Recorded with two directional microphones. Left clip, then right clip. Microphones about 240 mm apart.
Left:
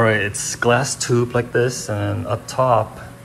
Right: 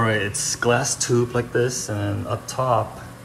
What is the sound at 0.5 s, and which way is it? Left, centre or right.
Speech, centre.